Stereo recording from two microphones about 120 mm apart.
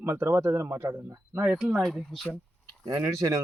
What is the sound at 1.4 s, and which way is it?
Speech, 5° right (ahead or behind).